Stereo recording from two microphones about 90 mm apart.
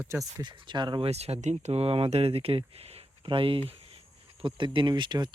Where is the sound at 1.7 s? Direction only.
90° right.